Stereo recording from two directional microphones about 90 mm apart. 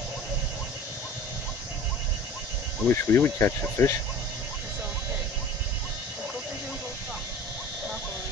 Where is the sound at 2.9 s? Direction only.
25° left (ahead or behind).